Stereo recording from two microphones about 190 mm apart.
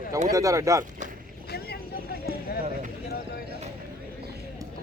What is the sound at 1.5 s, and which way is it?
Vehicle, 55° left (ahead or behind).